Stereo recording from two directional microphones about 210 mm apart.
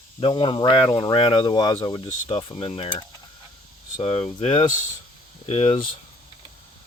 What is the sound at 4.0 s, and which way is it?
Speech, 30° left (ahead or behind).